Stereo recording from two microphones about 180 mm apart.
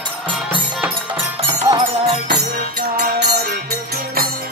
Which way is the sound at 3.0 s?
55° right (ahead or behind).